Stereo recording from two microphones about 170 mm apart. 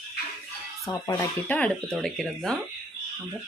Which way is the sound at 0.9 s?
15° left (ahead or behind).